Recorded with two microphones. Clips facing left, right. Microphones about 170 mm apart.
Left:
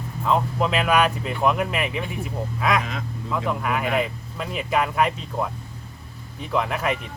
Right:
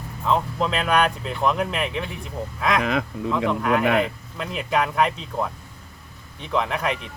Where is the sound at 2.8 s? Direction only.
70° right (ahead or behind).